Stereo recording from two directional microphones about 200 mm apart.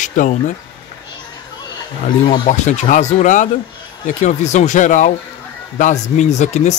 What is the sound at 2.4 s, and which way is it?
Speech, 40° left (ahead or behind).